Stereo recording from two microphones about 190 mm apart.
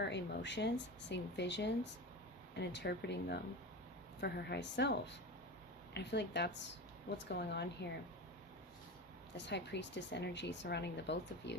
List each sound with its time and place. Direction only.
0.0 s speech: 65° left (ahead or behind)
9.4 s speech: 65° left (ahead or behind)